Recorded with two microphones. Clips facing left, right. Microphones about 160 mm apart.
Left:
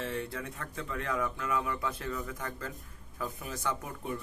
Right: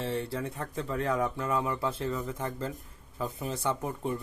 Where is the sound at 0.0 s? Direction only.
30° right (ahead or behind).